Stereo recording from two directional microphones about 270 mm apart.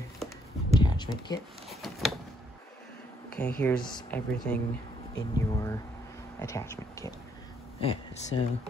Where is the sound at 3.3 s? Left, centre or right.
Centre.